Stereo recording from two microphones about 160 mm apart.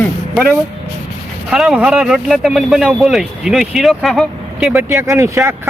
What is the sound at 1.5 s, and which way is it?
Speech, 5° right (ahead or behind).